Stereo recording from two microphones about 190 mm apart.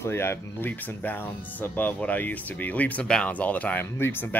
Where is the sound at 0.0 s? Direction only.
15° left (ahead or behind).